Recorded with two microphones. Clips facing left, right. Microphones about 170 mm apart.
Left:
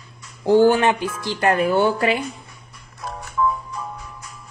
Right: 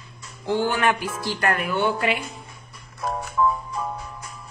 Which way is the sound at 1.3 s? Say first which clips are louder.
Left 6 dB; 20° left (ahead or behind).